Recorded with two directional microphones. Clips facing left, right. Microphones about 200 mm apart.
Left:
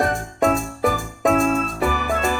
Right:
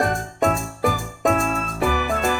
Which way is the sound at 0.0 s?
Centre (ahead or behind).